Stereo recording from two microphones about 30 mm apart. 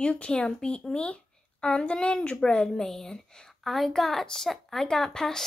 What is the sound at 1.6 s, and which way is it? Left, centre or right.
Speech, left.